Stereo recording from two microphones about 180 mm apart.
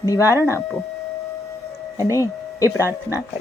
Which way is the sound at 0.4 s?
15° left (ahead or behind).